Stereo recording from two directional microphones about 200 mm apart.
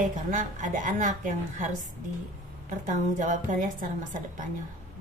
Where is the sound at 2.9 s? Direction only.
40° right (ahead or behind).